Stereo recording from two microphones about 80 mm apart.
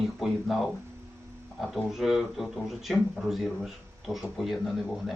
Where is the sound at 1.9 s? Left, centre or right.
Centre.